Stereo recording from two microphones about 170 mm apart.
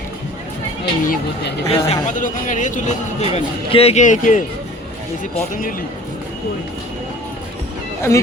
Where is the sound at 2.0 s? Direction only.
50° left (ahead or behind).